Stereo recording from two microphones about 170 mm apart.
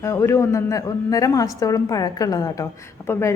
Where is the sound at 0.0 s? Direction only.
15° left (ahead or behind).